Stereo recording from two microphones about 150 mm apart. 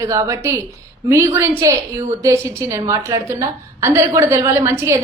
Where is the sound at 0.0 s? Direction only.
20° right (ahead or behind).